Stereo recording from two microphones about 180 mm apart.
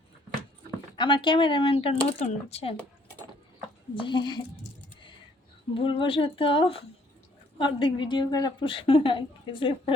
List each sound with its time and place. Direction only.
0.9 s a woman's voice: 25° left (ahead or behind)
3.9 s a woman's voice: 25° left (ahead or behind)
5.7 s a woman's voice: 30° left (ahead or behind)